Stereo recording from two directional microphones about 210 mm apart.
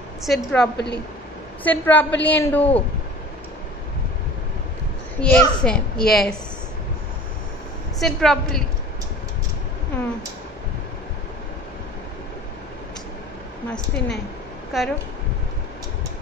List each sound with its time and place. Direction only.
0.2 s a child's voice: centre (ahead or behind)
0.7 s a woman's voice: 55° left (ahead or behind)
1.6 s a woman's voice: 10° left (ahead or behind)
5.2 s a child's voice: 5° left (ahead or behind)
8.0 s a child's voice: centre (ahead or behind)
13.7 s a child's voice: 5° left (ahead or behind)